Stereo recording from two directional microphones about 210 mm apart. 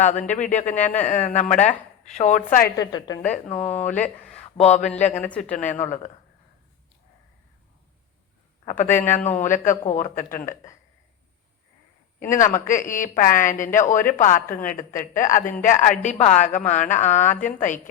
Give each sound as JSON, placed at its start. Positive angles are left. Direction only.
{"t": 0.3, "sound": "a woman's voice", "side_deg": 35}
{"t": 2.7, "sound": "a woman's voice", "side_deg": 20}
{"t": 3.5, "sound": "speech", "side_deg": 5}
{"t": 5.5, "sound": "a woman's voice", "side_deg": 35}
{"t": 8.8, "sound": "a woman's voice", "side_deg": 35}
{"t": 12.2, "sound": "a woman's voice", "side_deg": 35}